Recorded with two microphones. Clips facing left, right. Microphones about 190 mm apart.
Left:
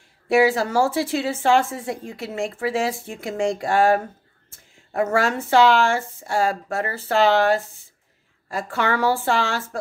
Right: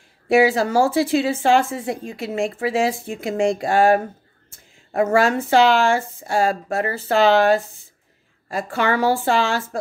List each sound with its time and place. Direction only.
0.3 s speech: 15° right (ahead or behind)
8.7 s speech: 15° right (ahead or behind)